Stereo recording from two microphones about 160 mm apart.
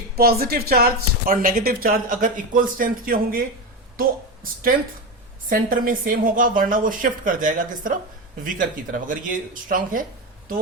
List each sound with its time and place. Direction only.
0.2 s speech: 70° right (ahead or behind)
5.5 s speech: 60° right (ahead or behind)